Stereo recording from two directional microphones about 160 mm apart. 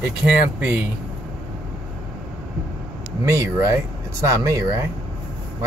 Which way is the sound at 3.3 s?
20° right (ahead or behind).